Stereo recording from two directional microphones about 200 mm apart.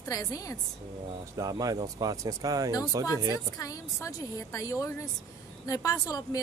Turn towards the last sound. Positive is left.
turn(degrees=20)  # may be behind; listen again after turning